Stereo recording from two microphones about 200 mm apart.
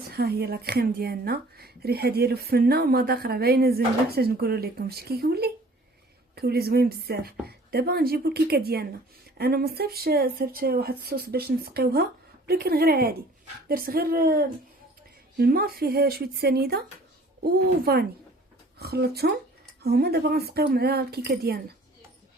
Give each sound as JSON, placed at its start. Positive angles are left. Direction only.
{"t": 0.1, "sound": "speech", "side_deg": -50}